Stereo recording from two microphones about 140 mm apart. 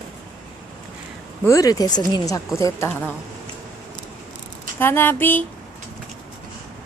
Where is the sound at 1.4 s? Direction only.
25° left (ahead or behind).